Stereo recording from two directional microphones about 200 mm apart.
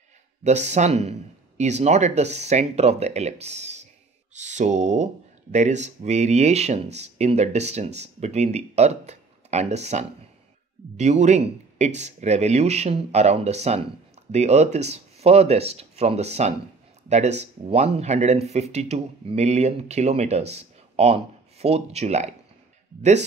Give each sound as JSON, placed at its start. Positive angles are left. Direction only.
{"t": 0.4, "sound": "speech", "side_deg": -35}